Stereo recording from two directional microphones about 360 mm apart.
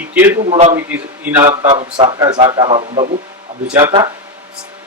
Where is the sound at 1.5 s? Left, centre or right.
Centre.